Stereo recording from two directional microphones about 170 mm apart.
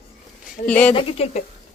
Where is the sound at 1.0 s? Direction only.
35° left (ahead or behind).